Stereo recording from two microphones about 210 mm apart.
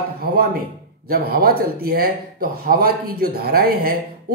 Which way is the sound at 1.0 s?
45° right (ahead or behind).